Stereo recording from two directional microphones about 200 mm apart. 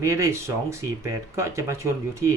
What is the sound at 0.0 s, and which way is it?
Speech, 15° right (ahead or behind).